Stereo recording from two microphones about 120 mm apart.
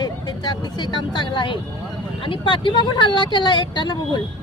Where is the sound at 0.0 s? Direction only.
40° left (ahead or behind).